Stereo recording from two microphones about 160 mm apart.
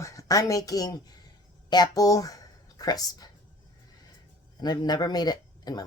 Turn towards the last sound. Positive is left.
turn(degrees=25)  # may be behind; listen again after turning